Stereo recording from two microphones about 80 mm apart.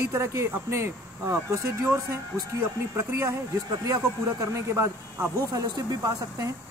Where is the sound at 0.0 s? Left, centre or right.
Right.